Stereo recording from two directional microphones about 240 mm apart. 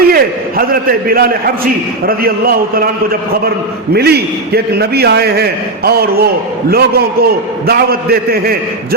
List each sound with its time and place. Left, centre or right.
0.1 s a man's voice: right